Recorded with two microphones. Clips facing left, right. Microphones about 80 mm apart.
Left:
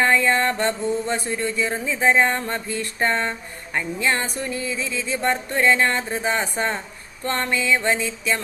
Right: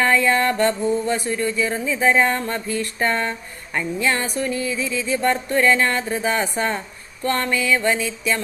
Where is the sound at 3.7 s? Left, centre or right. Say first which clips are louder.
Right 1 dB; left.